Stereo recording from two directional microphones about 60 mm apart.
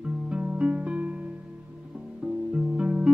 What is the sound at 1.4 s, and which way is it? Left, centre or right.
Music, centre.